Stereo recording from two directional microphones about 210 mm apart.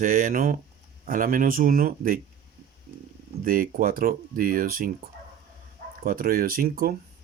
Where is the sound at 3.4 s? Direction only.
40° right (ahead or behind).